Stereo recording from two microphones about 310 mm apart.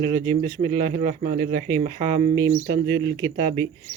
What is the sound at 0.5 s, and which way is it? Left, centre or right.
Speech, centre.